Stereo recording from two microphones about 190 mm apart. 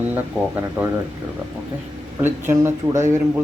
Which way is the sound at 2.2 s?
10° right (ahead or behind).